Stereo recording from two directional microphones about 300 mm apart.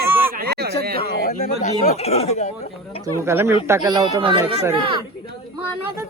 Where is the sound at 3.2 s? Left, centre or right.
Centre.